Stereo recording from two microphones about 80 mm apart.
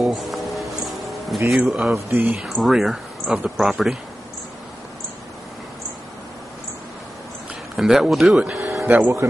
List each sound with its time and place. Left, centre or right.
0.0 s music: centre
1.5 s speech: centre
2.0 s speech: right
2.2 s speech: centre
7.7 s speech: centre
8.5 s music: centre
8.8 s speech: right